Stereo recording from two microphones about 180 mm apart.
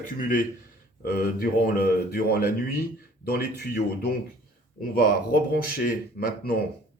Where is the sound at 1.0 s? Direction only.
60° left (ahead or behind).